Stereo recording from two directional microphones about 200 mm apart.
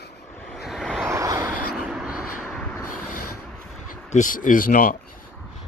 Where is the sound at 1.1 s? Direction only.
15° right (ahead or behind).